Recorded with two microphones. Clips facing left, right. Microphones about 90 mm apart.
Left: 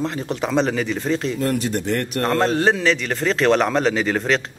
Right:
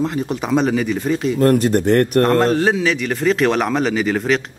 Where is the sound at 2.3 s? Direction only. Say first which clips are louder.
Right 3 dB; centre (ahead or behind).